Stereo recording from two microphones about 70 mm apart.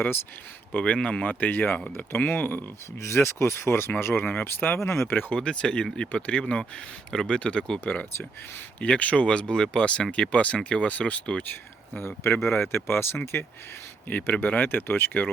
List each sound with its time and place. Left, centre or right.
0.7 s speech: centre
3.0 s speech: left
5.3 s speech: centre
11.9 s speech: left
14.1 s speech: left